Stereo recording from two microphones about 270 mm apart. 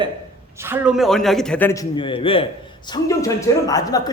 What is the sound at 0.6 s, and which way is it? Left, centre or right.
A man's voice, centre.